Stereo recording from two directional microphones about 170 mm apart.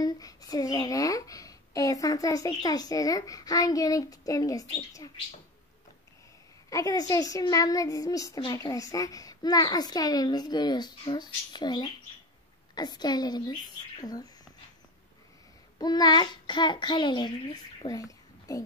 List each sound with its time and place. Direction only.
0.0 s speech: 20° left (ahead or behind)
6.7 s speech: 20° left (ahead or behind)
15.8 s speech: 25° left (ahead or behind)